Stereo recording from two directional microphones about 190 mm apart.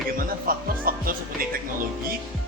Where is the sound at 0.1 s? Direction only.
50° right (ahead or behind).